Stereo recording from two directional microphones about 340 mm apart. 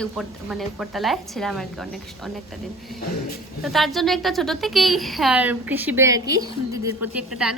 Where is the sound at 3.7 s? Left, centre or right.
Centre.